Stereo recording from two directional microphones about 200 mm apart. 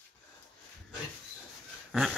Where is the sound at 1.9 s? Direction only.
Centre (ahead or behind).